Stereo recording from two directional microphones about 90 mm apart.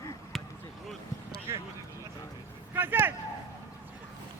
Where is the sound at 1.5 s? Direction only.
30° right (ahead or behind).